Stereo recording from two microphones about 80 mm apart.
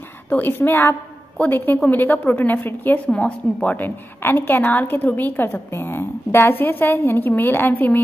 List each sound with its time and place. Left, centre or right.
0.3 s a woman's voice: left